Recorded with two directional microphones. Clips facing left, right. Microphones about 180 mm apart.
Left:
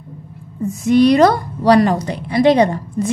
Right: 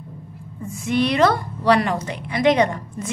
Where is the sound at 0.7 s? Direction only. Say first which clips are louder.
Left 9 dB; 40° left (ahead or behind).